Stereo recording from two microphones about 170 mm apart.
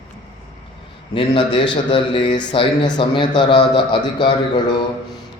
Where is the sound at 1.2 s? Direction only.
25° left (ahead or behind).